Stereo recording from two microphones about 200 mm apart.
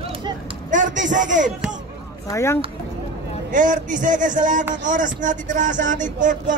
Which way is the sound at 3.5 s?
40° right (ahead or behind).